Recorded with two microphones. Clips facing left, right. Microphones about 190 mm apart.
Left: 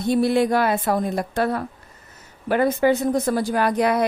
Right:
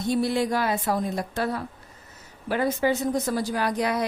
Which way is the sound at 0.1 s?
60° left (ahead or behind).